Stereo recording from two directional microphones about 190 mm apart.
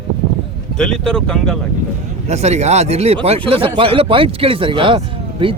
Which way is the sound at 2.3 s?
35° right (ahead or behind).